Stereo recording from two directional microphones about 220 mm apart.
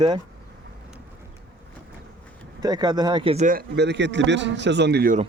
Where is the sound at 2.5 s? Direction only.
15° right (ahead or behind); by 5.2 s 45° right (ahead or behind).